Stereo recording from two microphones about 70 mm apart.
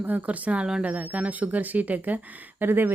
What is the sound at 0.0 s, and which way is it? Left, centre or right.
Speech, right.